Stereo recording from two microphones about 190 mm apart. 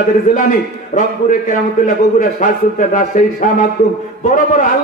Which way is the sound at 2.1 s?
45° left (ahead or behind).